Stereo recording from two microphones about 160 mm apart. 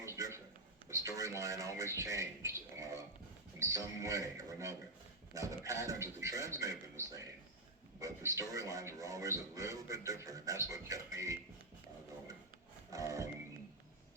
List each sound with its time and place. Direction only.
0.0 s a sound: 15° right (ahead or behind)
1.4 s speech: 20° right (ahead or behind)
12.9 s music: 20° right (ahead or behind)